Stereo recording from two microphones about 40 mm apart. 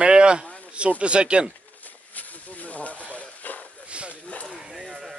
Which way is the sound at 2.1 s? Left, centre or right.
Left.